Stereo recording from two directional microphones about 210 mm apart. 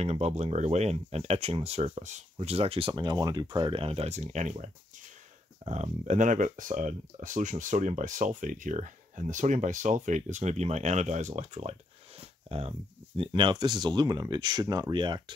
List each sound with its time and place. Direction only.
0.0 s speech: 30° right (ahead or behind)
5.7 s speech: 35° right (ahead or behind)
12.2 s a sound: 30° right (ahead or behind)
13.2 s speech: 20° right (ahead or behind)